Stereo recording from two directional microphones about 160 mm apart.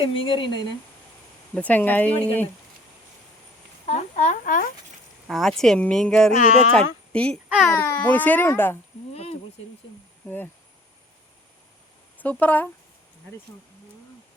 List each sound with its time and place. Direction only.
0.0 s speech: 35° left (ahead or behind)
1.5 s a child's voice: 10° left (ahead or behind)
3.8 s speech: 45° left (ahead or behind)
5.3 s speech: centre (ahead or behind)
6.3 s speech: 50° left (ahead or behind)
6.7 s a child's voice: 5° left (ahead or behind)
9.1 s a sound: 40° left (ahead or behind)
10.2 s a child's voice: 10° left (ahead or behind)
12.2 s a child's voice: 10° left (ahead or behind)